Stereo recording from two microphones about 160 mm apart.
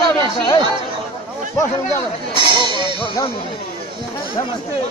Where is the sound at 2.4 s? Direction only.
30° right (ahead or behind).